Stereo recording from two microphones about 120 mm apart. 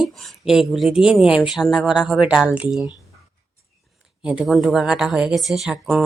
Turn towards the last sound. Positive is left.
turn(degrees=-5)  # may be behind; listen again after turning